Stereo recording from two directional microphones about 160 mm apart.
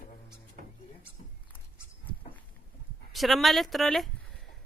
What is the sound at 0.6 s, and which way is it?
Music, 60° right (ahead or behind).